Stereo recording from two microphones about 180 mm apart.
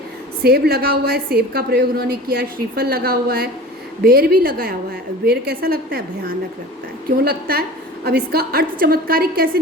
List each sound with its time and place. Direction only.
0.4 s a woman's voice: 60° right (ahead or behind)